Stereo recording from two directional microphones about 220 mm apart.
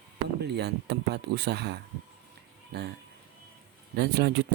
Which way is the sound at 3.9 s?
50° right (ahead or behind).